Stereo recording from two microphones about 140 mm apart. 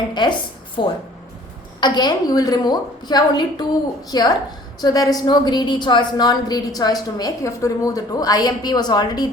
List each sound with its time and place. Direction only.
0.1 s a woman's voice: 30° left (ahead or behind)